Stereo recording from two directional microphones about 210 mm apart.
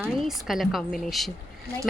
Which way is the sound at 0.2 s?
Centre (ahead or behind).